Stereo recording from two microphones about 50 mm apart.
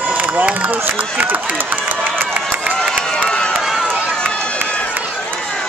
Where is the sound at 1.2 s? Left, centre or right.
Right.